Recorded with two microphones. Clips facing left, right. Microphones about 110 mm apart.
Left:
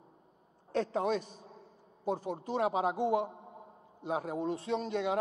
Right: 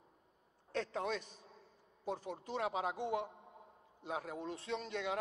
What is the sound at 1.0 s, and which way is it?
A man's voice, 35° left (ahead or behind).